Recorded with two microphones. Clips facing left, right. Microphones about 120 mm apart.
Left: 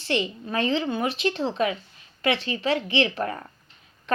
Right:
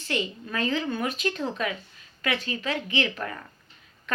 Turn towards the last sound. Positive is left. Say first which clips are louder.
# left 4 dB
turn(degrees=35)  # may be behind; listen again after turning